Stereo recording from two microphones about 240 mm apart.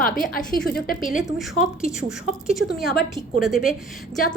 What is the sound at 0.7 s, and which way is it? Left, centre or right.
Speech, left.